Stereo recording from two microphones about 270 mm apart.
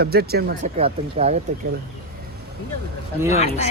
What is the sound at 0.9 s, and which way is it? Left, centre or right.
Speech, right.